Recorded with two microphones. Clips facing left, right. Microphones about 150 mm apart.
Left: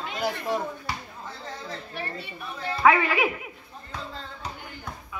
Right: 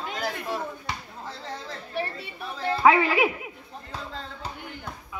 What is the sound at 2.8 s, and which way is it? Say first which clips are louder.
Speech: right 1 dB; 30° right (ahead or behind).